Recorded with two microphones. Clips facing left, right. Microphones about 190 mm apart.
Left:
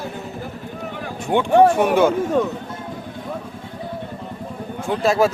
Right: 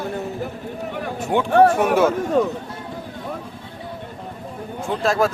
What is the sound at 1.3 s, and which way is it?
Speech, centre (ahead or behind).